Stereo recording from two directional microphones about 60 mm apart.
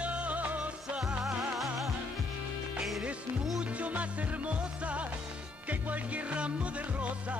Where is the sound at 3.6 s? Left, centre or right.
Right.